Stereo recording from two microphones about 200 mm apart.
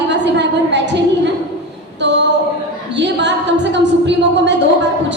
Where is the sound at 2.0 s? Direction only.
60° right (ahead or behind).